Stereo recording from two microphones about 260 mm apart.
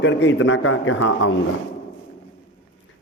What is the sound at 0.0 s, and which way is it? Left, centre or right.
A man's voice, left.